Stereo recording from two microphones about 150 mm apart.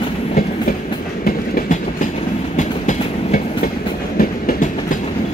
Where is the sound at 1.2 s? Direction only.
80° left.